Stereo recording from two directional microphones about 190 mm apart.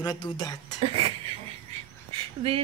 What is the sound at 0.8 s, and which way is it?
Speech, 30° right (ahead or behind).